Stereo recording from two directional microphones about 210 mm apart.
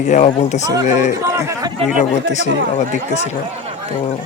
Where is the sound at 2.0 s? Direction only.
35° left (ahead or behind).